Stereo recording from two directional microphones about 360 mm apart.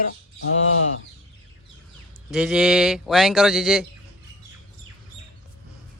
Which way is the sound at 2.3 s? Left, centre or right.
Centre.